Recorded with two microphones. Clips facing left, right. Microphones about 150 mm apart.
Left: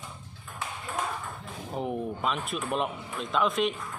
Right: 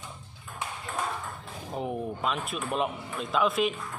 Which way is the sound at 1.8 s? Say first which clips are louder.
Left 1 dB; centre (ahead or behind).